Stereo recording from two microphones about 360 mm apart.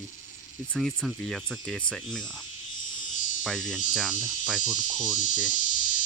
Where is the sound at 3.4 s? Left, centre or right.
Centre.